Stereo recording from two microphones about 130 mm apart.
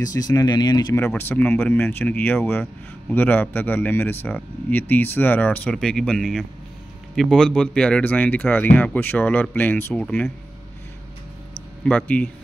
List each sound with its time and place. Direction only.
0.0 s speech: 25° left (ahead or behind)
0.9 s speech: 15° left (ahead or behind)
11.8 s speech: 10° left (ahead or behind)